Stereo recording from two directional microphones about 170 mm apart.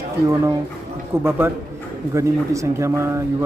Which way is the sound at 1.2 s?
15° right (ahead or behind).